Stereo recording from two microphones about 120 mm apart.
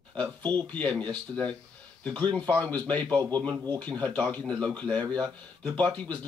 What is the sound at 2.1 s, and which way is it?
Speech, 10° left (ahead or behind).